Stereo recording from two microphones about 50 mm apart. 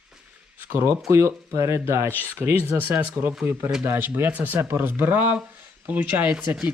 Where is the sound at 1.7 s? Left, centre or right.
Right.